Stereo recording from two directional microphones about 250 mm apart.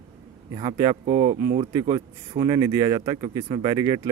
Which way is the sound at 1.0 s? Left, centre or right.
Right.